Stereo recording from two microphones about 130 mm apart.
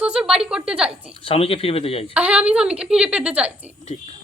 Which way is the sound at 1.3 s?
45° left (ahead or behind).